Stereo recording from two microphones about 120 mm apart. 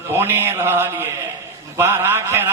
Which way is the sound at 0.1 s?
20° right (ahead or behind).